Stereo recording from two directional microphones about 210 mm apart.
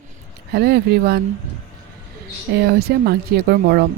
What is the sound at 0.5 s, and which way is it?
Speech, 50° right (ahead or behind).